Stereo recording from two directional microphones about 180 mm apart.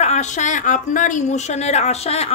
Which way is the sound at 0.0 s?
40° left (ahead or behind).